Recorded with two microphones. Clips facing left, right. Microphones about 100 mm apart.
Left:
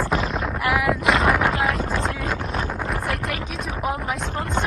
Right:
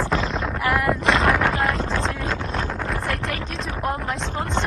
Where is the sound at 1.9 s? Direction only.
5° left (ahead or behind).